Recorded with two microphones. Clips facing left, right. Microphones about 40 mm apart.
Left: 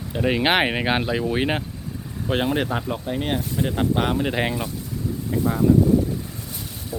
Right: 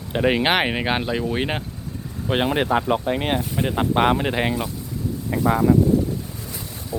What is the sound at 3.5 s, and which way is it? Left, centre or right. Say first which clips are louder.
Speech: even; right.